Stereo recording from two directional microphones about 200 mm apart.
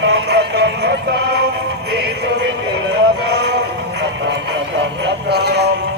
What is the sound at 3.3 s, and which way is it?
Music, 55° right (ahead or behind).